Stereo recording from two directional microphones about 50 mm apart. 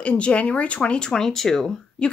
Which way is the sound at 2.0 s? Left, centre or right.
Left.